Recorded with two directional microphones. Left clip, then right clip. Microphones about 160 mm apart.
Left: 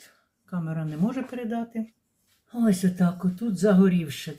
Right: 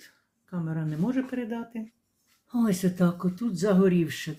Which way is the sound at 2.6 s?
50° right (ahead or behind).